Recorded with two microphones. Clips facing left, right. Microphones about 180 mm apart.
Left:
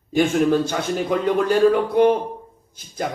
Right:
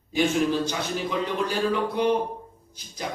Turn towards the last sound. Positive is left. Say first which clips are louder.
# left 7 dB
turn(degrees=50)  # may be behind; listen again after turning